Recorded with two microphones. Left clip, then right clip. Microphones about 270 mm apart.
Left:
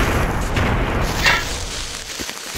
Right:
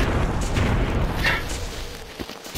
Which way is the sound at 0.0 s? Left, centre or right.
Left.